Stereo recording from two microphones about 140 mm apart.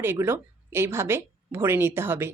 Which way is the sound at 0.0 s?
15° right (ahead or behind).